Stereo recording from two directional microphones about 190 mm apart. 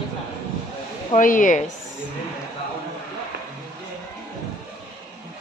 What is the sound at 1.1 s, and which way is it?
Speech, 45° left (ahead or behind).